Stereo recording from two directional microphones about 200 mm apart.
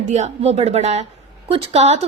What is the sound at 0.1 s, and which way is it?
A woman's voice, 35° right (ahead or behind).